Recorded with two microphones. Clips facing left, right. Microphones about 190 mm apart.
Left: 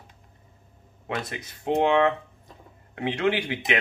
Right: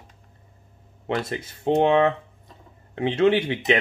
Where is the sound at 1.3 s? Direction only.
25° right (ahead or behind).